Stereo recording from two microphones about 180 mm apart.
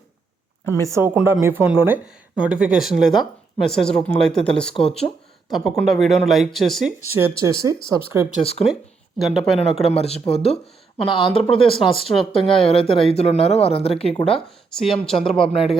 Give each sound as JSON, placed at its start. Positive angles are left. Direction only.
{"t": 0.6, "sound": "speech", "side_deg": 15}
{"t": 0.9, "sound": "speech", "side_deg": -15}
{"t": 7.0, "sound": "speech", "side_deg": -15}
{"t": 8.4, "sound": "speech", "side_deg": 35}
{"t": 8.6, "sound": "speech", "side_deg": 0}
{"t": 9.8, "sound": "speech", "side_deg": 35}
{"t": 14.3, "sound": "speech", "side_deg": 5}